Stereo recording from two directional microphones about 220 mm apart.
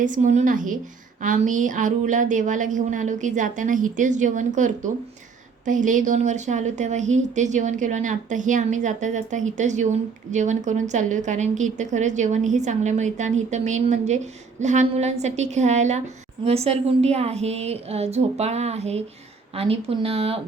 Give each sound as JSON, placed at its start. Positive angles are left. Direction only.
{"t": 0.0, "sound": "a woman's voice", "side_deg": -35}